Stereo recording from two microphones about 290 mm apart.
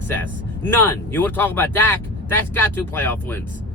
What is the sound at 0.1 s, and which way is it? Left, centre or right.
Speech, centre.